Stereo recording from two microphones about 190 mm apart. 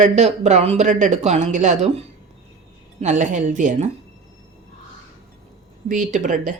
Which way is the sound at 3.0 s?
40° right (ahead or behind).